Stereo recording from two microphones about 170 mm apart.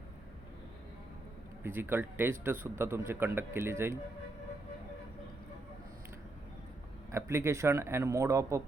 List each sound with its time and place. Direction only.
1.6 s a man's voice: 15° right (ahead or behind)
7.1 s a man's voice: 15° right (ahead or behind)